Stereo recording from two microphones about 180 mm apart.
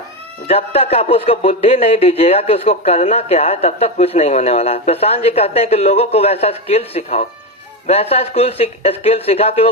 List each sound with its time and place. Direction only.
0.4 s a man's voice: 35° left (ahead or behind)